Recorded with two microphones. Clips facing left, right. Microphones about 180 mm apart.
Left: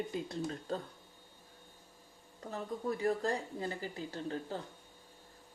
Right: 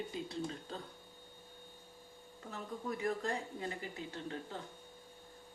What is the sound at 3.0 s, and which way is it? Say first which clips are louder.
Speech: left 3 dB; 35° left (ahead or behind).